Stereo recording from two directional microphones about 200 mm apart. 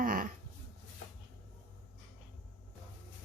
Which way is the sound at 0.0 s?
45° right (ahead or behind).